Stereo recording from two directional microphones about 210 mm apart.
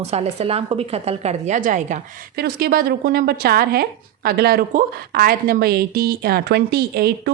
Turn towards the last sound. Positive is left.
turn(degrees=-50)  # may be behind; listen again after turning